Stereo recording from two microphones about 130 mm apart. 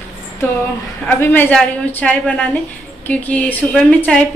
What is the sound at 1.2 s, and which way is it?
Speech, 15° left (ahead or behind).